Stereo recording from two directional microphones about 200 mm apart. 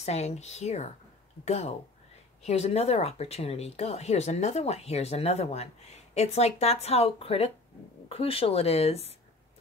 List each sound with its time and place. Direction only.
0.0 s speech: 35° left (ahead or behind)